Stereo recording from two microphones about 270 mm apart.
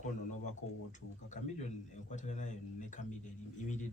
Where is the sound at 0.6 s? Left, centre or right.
Left.